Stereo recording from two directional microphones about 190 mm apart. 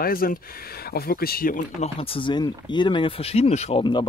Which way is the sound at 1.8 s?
30° left (ahead or behind).